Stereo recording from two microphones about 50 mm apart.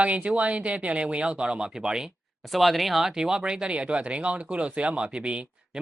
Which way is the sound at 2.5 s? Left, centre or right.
Centre.